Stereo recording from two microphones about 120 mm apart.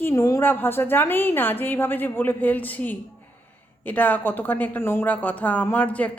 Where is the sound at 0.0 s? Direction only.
20° left (ahead or behind).